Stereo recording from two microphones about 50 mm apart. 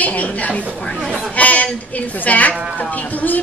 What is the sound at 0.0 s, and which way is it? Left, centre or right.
A woman's voice, left.